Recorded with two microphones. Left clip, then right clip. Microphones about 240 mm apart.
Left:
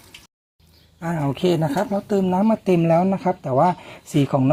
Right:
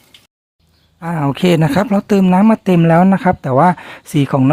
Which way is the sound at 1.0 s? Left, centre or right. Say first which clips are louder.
Right 6 dB; right.